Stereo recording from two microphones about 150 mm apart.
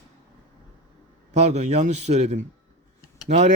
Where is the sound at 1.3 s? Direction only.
45° right (ahead or behind).